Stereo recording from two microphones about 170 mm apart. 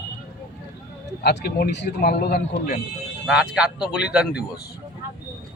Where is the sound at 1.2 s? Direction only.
75° left (ahead or behind).